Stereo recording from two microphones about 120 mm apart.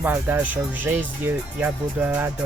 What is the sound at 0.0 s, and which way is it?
Music, 15° right (ahead or behind).